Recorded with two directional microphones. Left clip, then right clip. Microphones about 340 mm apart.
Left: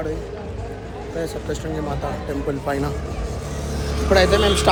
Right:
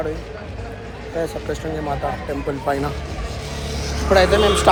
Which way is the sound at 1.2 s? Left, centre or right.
Centre.